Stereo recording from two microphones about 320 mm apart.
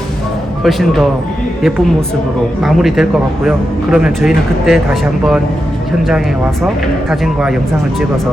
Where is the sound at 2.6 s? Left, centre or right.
Centre.